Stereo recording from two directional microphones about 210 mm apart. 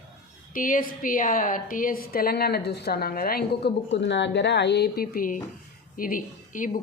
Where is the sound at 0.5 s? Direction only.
40° left (ahead or behind).